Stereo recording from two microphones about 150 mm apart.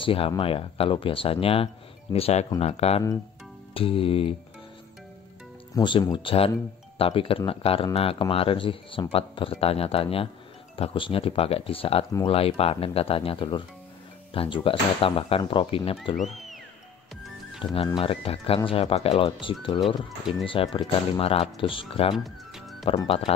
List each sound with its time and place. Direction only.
0.0 s speech: 35° left (ahead or behind)
5.8 s speech: 30° left (ahead or behind)
16.3 s music: centre (ahead or behind)
17.8 s speech: 35° left (ahead or behind)
22.1 s music: centre (ahead or behind)
23.0 s speech: 40° left (ahead or behind)